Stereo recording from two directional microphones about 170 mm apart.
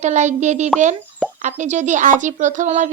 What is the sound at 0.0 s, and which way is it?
Speech, 45° right (ahead or behind).